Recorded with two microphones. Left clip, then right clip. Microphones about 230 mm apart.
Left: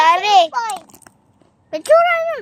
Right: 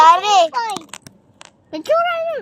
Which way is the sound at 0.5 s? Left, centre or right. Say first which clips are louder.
Even; left.